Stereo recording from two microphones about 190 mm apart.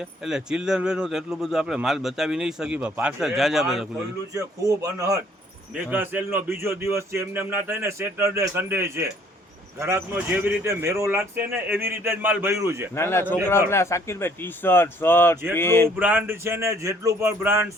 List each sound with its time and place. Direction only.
0.3 s speech: 5° right (ahead or behind)
4.4 s speech: 15° right (ahead or behind)
13.0 s a man's voice: 15° left (ahead or behind)
16.0 s speech: 10° right (ahead or behind)